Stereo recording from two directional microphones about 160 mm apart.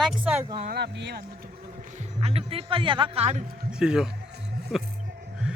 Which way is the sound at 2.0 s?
40° right (ahead or behind).